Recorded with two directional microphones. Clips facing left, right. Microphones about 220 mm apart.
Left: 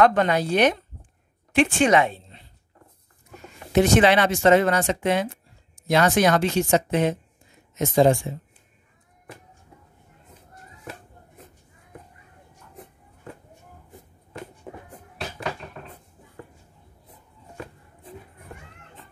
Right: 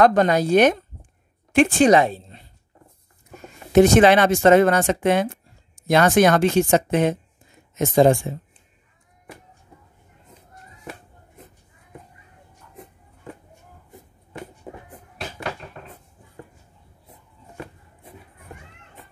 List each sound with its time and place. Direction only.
0.0 s a woman's voice: 40° right (ahead or behind)
3.7 s speech: 45° right (ahead or behind)